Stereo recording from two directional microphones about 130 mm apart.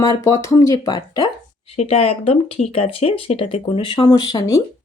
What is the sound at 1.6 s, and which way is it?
Speech, 55° left (ahead or behind).